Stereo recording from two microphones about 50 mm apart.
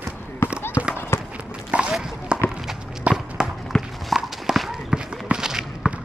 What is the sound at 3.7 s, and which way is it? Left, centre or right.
Clip-clop, centre.